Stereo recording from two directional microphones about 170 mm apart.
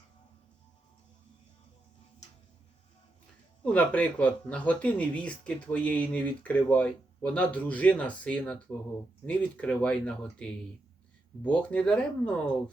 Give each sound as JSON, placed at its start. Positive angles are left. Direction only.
{"t": 3.6, "sound": "speech", "side_deg": 10}